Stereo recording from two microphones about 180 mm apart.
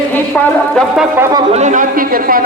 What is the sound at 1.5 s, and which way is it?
Speech, 40° right (ahead or behind).